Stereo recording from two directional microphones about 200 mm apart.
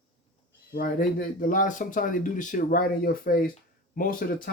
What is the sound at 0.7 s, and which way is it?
Speech, 45° left (ahead or behind).